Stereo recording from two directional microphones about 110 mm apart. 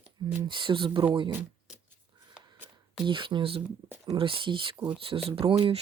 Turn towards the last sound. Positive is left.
turn(degrees=-55)  # may be behind; listen again after turning